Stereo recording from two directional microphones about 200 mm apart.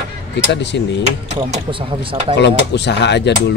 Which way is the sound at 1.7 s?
25° right (ahead or behind).